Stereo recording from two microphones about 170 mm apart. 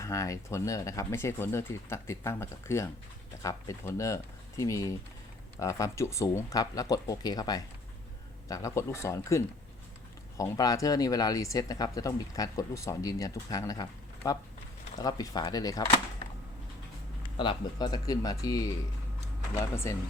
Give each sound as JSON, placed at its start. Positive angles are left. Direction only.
{"t": 0.0, "sound": "speech", "side_deg": 20}
{"t": 14.9, "sound": "speech", "side_deg": 20}
{"t": 17.3, "sound": "speech", "side_deg": 30}
{"t": 19.7, "sound": "speech", "side_deg": 15}